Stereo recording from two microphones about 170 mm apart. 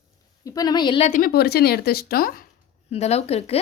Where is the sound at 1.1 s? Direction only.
60° left (ahead or behind).